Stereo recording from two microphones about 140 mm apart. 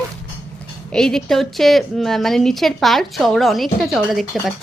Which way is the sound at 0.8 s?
5° left (ahead or behind).